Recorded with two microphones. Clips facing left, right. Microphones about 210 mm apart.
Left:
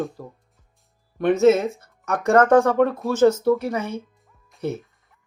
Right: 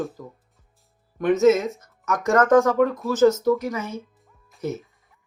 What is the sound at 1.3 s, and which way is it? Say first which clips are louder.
Speech: left 1 dB; 30° left (ahead or behind).